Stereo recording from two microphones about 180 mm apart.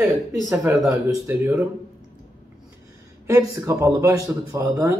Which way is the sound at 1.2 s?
10° right (ahead or behind).